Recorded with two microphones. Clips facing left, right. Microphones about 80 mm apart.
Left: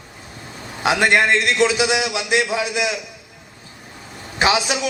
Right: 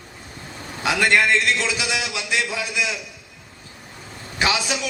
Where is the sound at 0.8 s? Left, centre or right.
Left.